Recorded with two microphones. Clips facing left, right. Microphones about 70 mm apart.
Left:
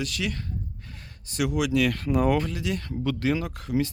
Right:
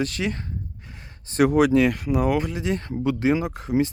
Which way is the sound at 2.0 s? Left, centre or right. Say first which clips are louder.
Right 1 dB; centre.